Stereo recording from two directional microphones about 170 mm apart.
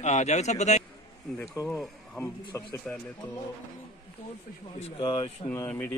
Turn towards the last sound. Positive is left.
turn(degrees=15)  # may be behind; listen again after turning